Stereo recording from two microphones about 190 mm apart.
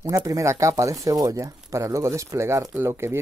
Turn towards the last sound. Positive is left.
turn(degrees=-15)  # may be behind; listen again after turning